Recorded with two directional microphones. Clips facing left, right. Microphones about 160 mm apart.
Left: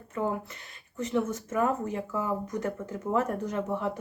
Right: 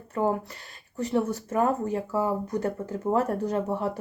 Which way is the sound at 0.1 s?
35° right (ahead or behind).